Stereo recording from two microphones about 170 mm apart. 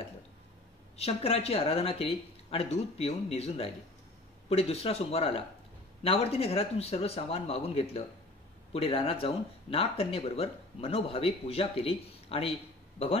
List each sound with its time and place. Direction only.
0.9 s speech: 35° left (ahead or behind)